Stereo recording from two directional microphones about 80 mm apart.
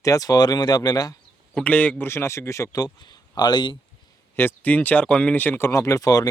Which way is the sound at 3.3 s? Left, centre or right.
Left.